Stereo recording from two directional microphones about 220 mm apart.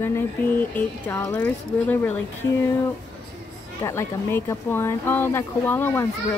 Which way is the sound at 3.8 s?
10° left (ahead or behind).